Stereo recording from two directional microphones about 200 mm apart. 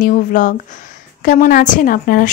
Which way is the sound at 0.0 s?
40° left (ahead or behind).